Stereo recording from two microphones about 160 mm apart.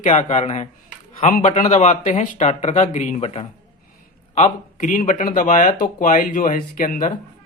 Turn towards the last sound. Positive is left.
turn(degrees=55)  # may be behind; listen again after turning